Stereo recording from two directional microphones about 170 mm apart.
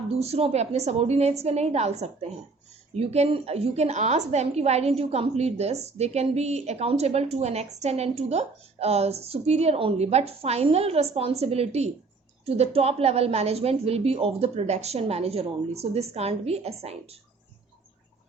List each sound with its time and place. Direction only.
0.1 s a woman's voice: 35° right (ahead or behind)